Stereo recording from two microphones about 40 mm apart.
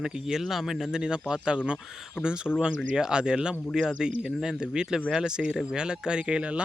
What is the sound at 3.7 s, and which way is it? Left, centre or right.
Speech, centre.